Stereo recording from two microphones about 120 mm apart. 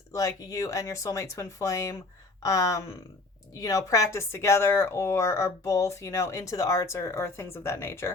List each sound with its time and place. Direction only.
0.1 s speech: 30° left (ahead or behind)